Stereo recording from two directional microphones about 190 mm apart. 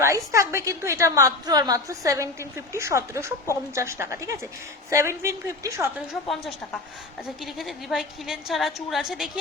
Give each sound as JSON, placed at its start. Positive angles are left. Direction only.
{"t": 0.0, "sound": "a woman's voice", "side_deg": -15}
{"t": 7.3, "sound": "a woman's voice", "side_deg": 0}